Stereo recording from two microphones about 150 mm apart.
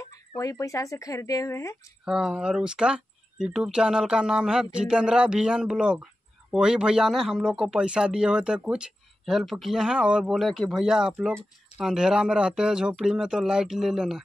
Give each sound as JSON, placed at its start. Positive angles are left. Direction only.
{"t": 0.4, "sound": "speech", "side_deg": 20}
{"t": 2.0, "sound": "speech", "side_deg": -5}